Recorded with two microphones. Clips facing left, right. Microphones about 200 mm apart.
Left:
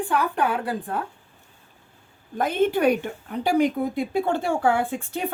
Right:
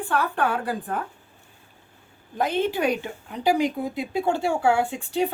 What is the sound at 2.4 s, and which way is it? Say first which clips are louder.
Speech: left 2 dB; 50° left (ahead or behind).